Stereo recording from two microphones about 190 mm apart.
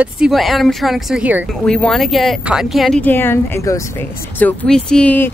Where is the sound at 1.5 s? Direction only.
5° left (ahead or behind).